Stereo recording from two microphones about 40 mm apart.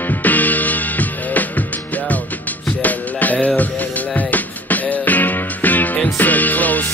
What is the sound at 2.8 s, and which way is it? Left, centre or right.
Music, left.